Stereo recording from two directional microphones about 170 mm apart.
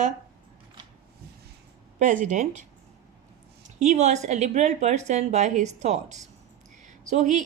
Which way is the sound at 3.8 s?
40° right (ahead or behind).